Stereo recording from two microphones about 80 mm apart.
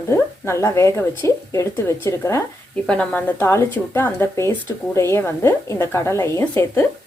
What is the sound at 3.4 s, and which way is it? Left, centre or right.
Speech, left.